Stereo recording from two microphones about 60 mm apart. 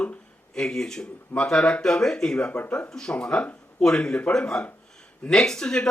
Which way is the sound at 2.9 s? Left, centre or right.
Centre.